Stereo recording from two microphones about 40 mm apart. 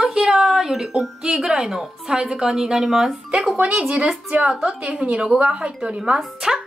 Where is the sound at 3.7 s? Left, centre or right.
Right.